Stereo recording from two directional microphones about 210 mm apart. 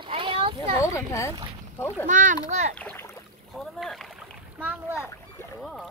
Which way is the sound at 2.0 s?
40° right (ahead or behind).